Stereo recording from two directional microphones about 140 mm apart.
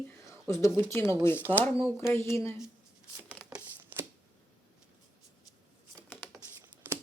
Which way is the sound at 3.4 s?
10° right (ahead or behind).